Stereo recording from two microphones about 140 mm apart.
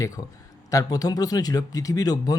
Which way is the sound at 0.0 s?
25° left (ahead or behind).